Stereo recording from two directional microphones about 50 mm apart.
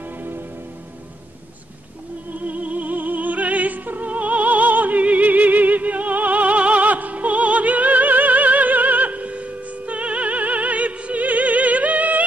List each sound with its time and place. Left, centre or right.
0.2 s music: right
2.3 s opera: right